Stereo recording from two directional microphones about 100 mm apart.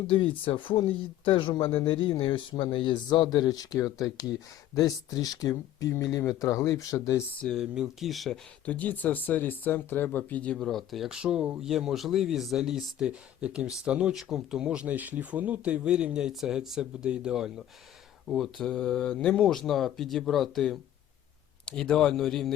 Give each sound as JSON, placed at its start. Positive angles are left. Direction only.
{"t": 0.1, "sound": "speech", "side_deg": 60}
{"t": 7.4, "sound": "speech", "side_deg": 0}
{"t": 8.6, "sound": "speech", "side_deg": 15}